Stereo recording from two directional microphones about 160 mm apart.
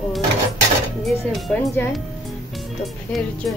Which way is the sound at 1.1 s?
Centre (ahead or behind).